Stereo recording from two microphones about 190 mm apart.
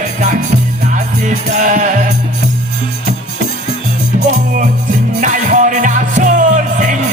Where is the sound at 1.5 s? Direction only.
40° right (ahead or behind).